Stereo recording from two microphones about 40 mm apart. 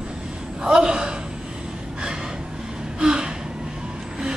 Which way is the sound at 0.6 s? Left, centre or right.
Right.